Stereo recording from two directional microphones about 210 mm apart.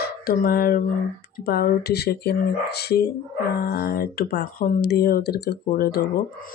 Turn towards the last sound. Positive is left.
turn(degrees=45)  # may be behind; listen again after turning